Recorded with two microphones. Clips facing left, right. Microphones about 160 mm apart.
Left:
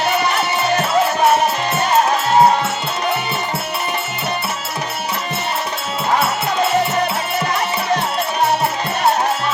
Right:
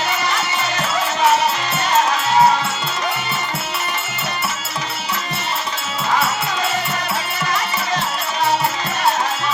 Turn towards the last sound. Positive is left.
turn(degrees=60)  # may be behind; listen again after turning